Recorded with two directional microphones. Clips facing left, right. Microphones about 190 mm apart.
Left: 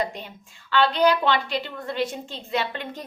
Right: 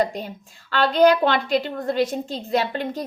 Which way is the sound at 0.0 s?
40° right (ahead or behind).